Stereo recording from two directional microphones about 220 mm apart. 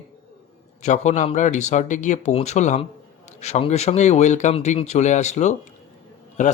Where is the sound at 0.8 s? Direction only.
30° left (ahead or behind).